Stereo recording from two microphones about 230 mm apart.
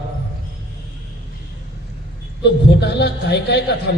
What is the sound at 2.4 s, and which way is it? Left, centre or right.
A man's voice, left.